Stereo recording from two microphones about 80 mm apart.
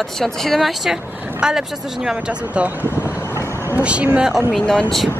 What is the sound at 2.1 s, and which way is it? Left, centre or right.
Speech, centre.